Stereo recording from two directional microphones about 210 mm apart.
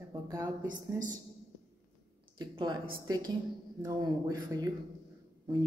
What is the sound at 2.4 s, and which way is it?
Speech, 20° right (ahead or behind).